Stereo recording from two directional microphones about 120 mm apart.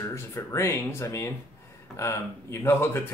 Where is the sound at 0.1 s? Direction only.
20° left (ahead or behind).